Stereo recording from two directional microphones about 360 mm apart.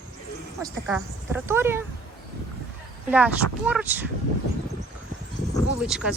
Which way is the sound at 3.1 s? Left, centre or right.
Centre.